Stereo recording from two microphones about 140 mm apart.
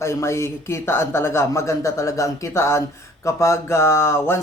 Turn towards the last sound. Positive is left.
turn(degrees=20)  # may be behind; listen again after turning